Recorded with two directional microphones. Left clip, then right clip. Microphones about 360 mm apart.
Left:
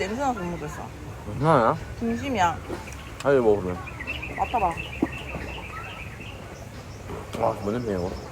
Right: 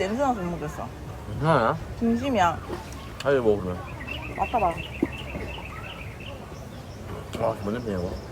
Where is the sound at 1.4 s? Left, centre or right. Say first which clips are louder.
Left 2 dB; centre.